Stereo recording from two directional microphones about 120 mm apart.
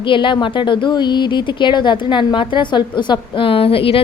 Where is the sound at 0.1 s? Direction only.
45° left (ahead or behind).